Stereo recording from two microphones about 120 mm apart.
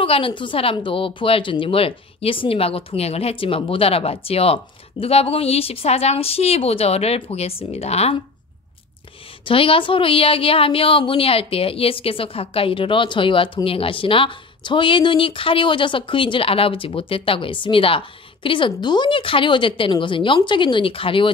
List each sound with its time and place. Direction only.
0.0 s speech: 45° left (ahead or behind)
9.4 s speech: 50° left (ahead or behind)